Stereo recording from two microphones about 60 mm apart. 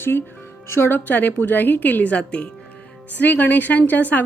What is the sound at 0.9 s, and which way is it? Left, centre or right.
A woman's voice, left.